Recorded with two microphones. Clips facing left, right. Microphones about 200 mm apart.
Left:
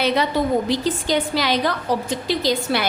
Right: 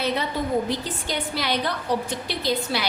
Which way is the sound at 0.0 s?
90° left.